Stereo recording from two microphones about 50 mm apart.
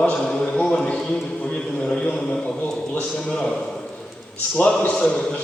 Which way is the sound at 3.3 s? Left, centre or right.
Centre.